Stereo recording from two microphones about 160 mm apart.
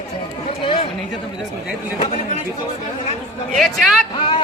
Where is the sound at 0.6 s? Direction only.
30° left (ahead or behind).